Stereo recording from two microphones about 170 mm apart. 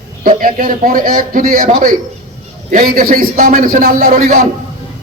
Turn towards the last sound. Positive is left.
turn(degrees=-55)  # may be behind; listen again after turning